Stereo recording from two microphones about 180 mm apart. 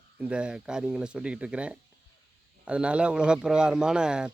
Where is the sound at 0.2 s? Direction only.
5° right (ahead or behind).